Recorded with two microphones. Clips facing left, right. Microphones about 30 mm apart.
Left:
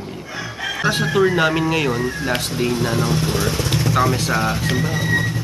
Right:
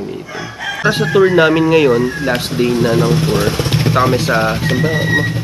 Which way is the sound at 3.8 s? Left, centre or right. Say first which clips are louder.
Right 4 dB; right.